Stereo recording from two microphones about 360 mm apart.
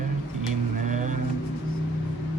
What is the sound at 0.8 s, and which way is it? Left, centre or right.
Vehicle, right.